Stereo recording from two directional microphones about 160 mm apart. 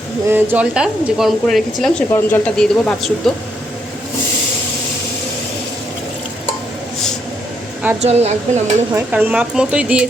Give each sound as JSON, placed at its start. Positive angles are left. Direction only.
{"t": 0.3, "sound": "speech", "side_deg": -15}
{"t": 8.0, "sound": "speech", "side_deg": -40}
{"t": 8.9, "sound": "speech", "side_deg": -15}